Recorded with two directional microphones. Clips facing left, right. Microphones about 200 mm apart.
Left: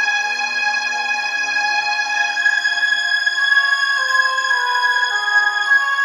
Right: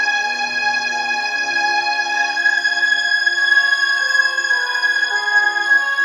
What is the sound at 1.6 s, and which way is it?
Music, 35° right (ahead or behind).